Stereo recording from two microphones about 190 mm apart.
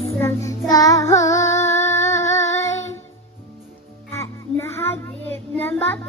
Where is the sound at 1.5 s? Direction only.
15° left (ahead or behind).